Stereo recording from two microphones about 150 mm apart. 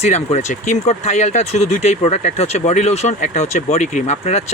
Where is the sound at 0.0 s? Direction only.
45° left (ahead or behind).